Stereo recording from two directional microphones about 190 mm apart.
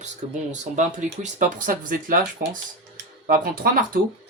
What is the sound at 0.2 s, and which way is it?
Speech, 40° right (ahead or behind).